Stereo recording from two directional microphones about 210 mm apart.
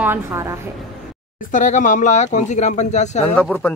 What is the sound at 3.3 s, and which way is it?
Speech, 5° left (ahead or behind).